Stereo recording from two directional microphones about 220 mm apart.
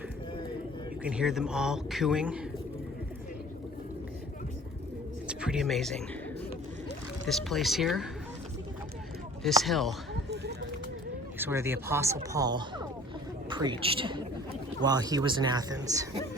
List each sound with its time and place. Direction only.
1.0 s speech: 5° right (ahead or behind)
5.3 s speech: 5° right (ahead or behind)
7.3 s speech: centre (ahead or behind)
9.4 s speech: centre (ahead or behind)
10.2 s a sound: 50° right (ahead or behind)
11.3 s a woman's voice: 10° right (ahead or behind)